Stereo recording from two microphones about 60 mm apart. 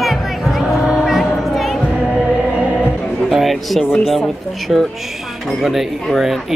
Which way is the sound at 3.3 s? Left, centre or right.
Centre.